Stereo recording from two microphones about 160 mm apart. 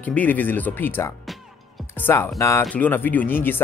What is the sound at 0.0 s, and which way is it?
Speech, 10° left (ahead or behind).